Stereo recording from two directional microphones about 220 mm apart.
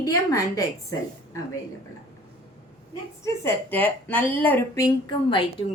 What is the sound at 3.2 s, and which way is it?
Speech, 10° left (ahead or behind).